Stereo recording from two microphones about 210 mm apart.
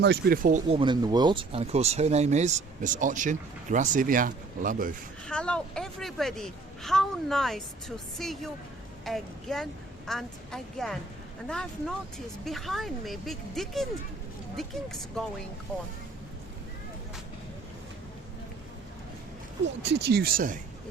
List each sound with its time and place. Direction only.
0.0 s speech: 50° right (ahead or behind)
0.8 s speech: 20° right (ahead or behind); by 4.9 s 40° right (ahead or behind)
5.2 s speech: 5° left (ahead or behind)
19.6 s speech: 55° right (ahead or behind); by 20.6 s 40° right (ahead or behind)